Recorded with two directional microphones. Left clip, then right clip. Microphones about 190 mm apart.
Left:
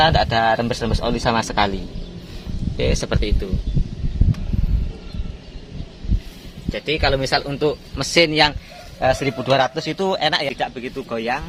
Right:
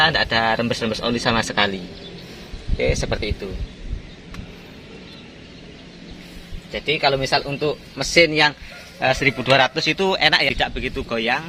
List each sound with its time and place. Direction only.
0.0 s speech: 55° left (ahead or behind)
2.7 s speech: 50° left (ahead or behind)
6.7 s speech: 45° left (ahead or behind)
9.0 s speech: 40° left (ahead or behind)
9.4 s speech: 25° left (ahead or behind)
10.5 s speech: centre (ahead or behind)